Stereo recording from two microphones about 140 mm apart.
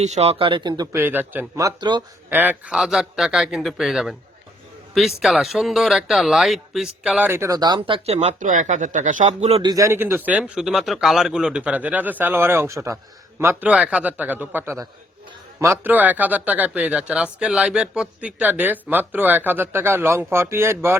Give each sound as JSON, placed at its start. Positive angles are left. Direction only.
{"t": 0.0, "sound": "a man's voice", "side_deg": -50}
{"t": 0.9, "sound": "speech", "side_deg": -15}
{"t": 2.3, "sound": "speech", "side_deg": -10}
{"t": 7.3, "sound": "speech", "side_deg": -20}
{"t": 9.6, "sound": "speech", "side_deg": -25}